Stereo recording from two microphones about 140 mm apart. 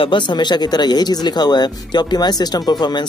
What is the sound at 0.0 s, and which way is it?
Speech, 35° left (ahead or behind).